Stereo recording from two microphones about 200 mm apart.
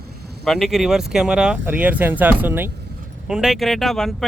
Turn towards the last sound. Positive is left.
turn(degrees=0)  # may be behind; listen again after turning